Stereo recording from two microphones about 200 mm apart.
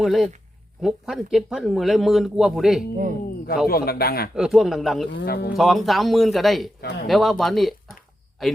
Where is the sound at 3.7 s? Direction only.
50° left (ahead or behind).